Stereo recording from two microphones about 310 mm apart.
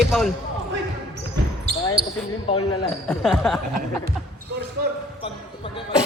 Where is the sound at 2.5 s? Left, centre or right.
Centre.